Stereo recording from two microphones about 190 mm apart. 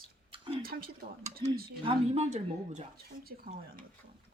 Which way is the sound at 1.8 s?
30° right (ahead or behind).